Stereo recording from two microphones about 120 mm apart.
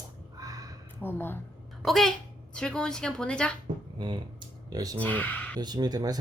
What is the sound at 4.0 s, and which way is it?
Speech, 40° right (ahead or behind).